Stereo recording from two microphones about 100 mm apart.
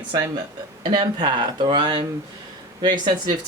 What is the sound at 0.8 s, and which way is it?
Speech, 50° right (ahead or behind).